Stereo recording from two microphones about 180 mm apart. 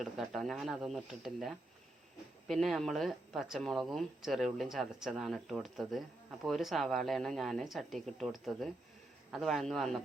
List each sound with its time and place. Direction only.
0.0 s speech: centre (ahead or behind)